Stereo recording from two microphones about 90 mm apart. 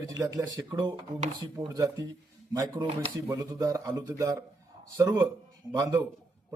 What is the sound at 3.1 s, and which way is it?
A man's voice, 40° right (ahead or behind).